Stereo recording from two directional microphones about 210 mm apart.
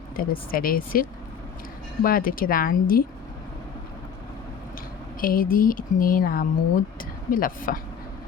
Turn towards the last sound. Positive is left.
turn(degrees=40)  # may be behind; listen again after turning